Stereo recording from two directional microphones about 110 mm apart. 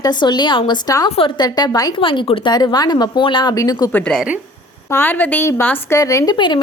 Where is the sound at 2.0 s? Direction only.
50° left (ahead or behind).